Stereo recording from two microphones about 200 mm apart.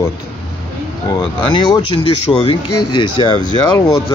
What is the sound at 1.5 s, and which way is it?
Speech, 25° left (ahead or behind).